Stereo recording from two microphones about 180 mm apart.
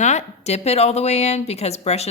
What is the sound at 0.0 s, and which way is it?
A woman's voice, 40° left (ahead or behind).